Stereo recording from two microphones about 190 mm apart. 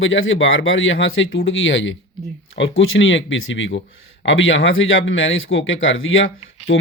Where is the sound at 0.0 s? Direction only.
90° left.